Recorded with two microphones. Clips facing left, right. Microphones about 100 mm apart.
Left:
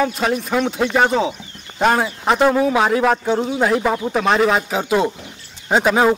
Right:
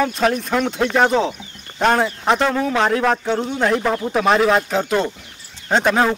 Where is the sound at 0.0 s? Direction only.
5° left (ahead or behind).